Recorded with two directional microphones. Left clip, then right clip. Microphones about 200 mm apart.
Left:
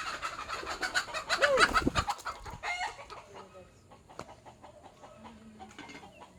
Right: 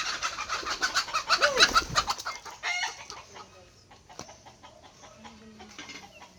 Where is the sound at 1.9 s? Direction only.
45° left (ahead or behind).